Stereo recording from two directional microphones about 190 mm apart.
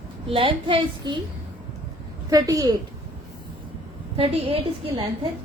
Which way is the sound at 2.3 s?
20° right (ahead or behind).